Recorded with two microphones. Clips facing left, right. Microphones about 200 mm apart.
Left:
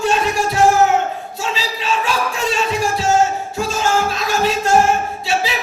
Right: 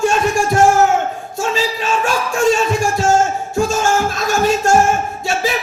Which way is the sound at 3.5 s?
50° right (ahead or behind).